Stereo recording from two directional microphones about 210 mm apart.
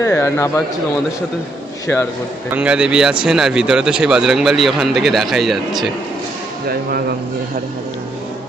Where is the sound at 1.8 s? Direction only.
10° left (ahead or behind).